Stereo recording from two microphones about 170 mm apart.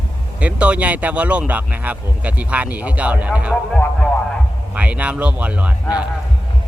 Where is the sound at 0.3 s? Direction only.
10° right (ahead or behind).